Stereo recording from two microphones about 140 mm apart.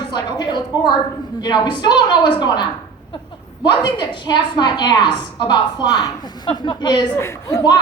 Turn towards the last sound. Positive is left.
turn(degrees=20)  # may be behind; listen again after turning